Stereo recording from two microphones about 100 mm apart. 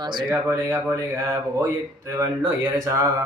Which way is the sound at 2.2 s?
35° right (ahead or behind).